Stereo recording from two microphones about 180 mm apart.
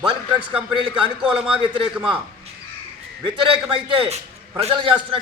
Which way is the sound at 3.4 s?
30° right (ahead or behind).